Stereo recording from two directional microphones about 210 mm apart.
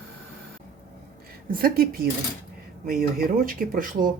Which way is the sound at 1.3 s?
45° right (ahead or behind).